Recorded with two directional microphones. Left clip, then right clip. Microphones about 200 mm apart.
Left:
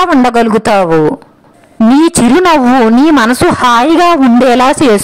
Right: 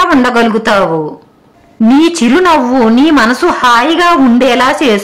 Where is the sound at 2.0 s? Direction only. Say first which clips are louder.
Left 1 dB; 45° left (ahead or behind).